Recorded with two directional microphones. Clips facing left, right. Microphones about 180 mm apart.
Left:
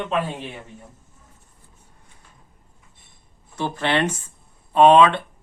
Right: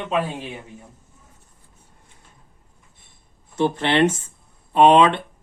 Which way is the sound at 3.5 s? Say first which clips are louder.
Right 4 dB; 25° right (ahead or behind).